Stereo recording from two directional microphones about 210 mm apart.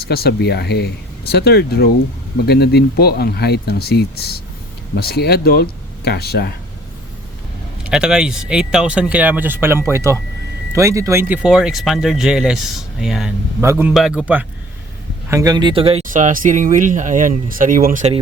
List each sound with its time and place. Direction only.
0.0 s speech: 50° left (ahead or behind)
7.9 s speech: 5° right (ahead or behind); by 18.1 s 40° right (ahead or behind)